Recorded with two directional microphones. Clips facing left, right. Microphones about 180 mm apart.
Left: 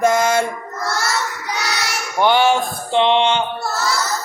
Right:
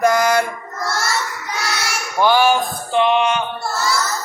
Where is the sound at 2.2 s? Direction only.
25° left (ahead or behind).